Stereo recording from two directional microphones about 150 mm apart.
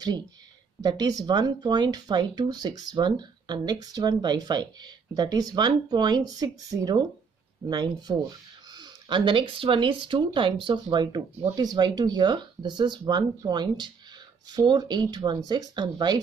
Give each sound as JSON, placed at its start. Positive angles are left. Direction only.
{"t": 0.8, "sound": "speech", "side_deg": -25}